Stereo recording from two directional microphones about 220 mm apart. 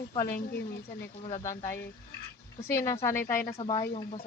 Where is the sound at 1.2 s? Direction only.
30° left (ahead or behind).